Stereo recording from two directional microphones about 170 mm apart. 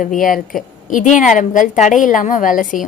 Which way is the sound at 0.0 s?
50° left (ahead or behind).